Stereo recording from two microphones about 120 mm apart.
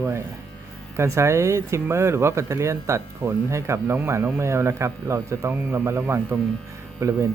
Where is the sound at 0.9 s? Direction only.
25° right (ahead or behind).